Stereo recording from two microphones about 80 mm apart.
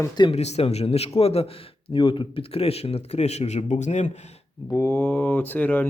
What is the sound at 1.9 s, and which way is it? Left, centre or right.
Speech, left.